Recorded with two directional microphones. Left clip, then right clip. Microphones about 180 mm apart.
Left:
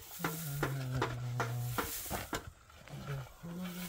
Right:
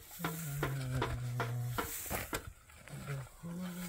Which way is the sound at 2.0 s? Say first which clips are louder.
Even; 25° right (ahead or behind).